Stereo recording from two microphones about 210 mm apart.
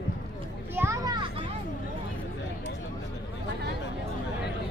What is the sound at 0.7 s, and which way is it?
Children playing, 15° right (ahead or behind).